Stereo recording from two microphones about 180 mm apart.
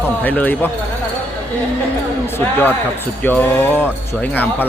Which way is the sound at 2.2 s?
10° left (ahead or behind).